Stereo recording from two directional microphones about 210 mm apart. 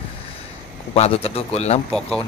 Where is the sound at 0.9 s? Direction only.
30° left (ahead or behind).